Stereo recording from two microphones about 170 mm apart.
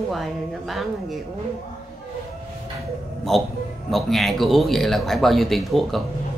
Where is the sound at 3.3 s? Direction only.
Centre (ahead or behind).